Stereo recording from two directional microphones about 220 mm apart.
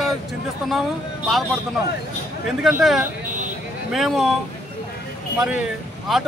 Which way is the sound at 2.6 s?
Centre (ahead or behind).